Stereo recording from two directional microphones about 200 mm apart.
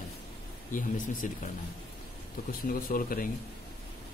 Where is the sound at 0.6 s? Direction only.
40° left (ahead or behind).